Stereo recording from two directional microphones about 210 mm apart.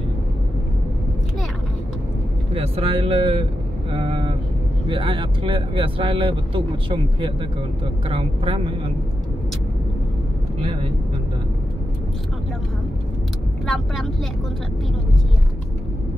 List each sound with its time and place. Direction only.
2.5 s speech: 25° right (ahead or behind)
10.6 s speech: 25° right (ahead or behind)
13.7 s a woman's voice: centre (ahead or behind)